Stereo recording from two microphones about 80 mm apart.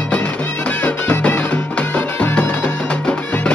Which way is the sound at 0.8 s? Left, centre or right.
Centre.